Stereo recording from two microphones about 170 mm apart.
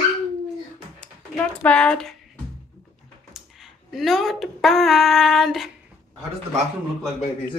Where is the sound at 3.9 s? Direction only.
Centre (ahead or behind).